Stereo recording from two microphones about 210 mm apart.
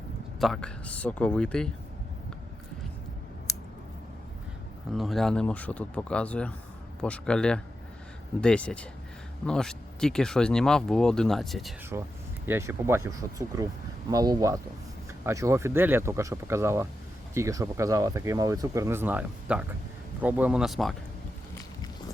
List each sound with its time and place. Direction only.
0.3 s speech: centre (ahead or behind)
4.9 s speech: centre (ahead or behind)
11.9 s speech: 15° right (ahead or behind)